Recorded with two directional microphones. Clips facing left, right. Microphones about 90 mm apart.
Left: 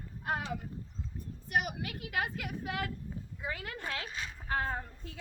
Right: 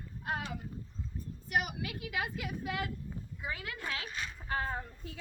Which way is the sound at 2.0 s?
50° left (ahead or behind).